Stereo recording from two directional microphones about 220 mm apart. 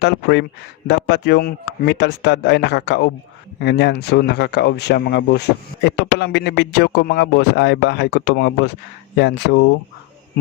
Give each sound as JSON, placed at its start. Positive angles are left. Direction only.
{"t": 0.0, "sound": "speech", "side_deg": 50}